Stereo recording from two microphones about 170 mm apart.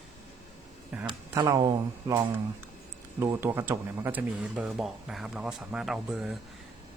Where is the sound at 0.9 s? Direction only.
10° right (ahead or behind).